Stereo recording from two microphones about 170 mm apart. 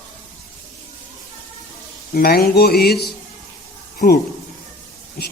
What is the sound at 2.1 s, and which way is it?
Speech, 65° left (ahead or behind).